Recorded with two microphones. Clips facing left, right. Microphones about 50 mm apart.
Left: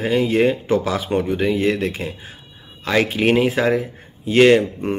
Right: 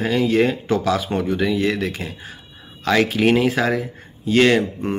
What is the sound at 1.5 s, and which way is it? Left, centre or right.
Speech, left.